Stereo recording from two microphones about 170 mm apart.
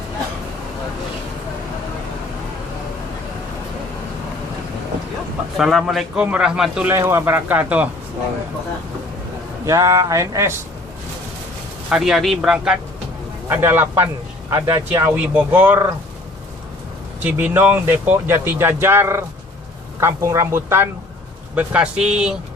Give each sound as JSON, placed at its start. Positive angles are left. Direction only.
{"t": 5.5, "sound": "a man's voice", "side_deg": 0}
{"t": 9.6, "sound": "speech", "side_deg": -20}
{"t": 11.9, "sound": "a man's voice", "side_deg": -5}
{"t": 17.2, "sound": "a man's voice", "side_deg": -10}